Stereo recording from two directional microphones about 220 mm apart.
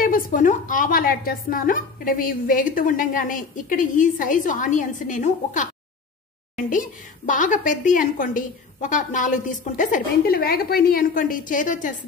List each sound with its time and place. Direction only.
0.0 s a woman's voice: 40° left (ahead or behind)
6.7 s a woman's voice: 35° left (ahead or behind)